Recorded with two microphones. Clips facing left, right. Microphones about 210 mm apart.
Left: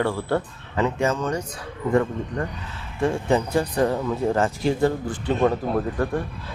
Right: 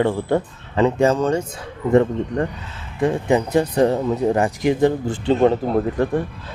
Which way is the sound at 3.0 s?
15° right (ahead or behind).